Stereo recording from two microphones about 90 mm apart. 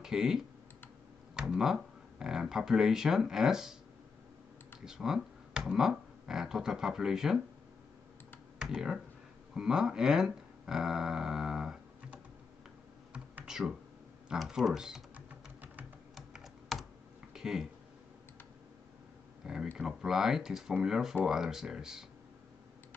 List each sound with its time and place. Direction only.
0.0 s speech: 5° right (ahead or behind)
4.8 s speech: 5° right (ahead or behind)
8.5 s speech: 10° right (ahead or behind)
9.5 s a sound: 10° right (ahead or behind)
13.1 s computer keyboard: 10° right (ahead or behind)
14.3 s speech: 5° right (ahead or behind)
15.1 s typing: 20° right (ahead or behind)
16.2 s computer keyboard: centre (ahead or behind)
17.3 s a sound: 5° right (ahead or behind)
19.4 s speech: 5° right (ahead or behind)